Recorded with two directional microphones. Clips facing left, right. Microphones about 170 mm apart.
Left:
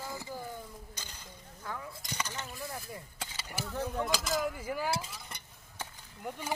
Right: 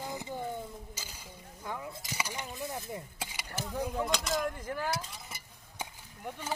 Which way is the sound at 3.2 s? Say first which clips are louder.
Right 2 dB; 10° right (ahead or behind).